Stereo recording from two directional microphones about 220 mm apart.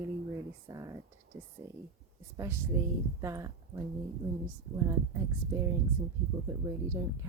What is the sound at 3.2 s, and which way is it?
Speech, 15° right (ahead or behind).